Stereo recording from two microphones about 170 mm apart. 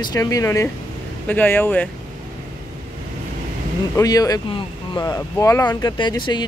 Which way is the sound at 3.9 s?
20° left (ahead or behind).